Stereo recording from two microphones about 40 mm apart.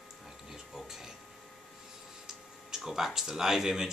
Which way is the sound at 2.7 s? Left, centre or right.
Centre.